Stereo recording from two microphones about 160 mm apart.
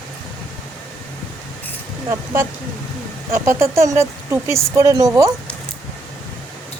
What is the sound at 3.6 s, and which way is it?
Speech, 15° right (ahead or behind).